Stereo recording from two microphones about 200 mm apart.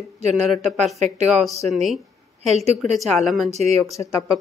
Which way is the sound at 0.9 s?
35° right (ahead or behind).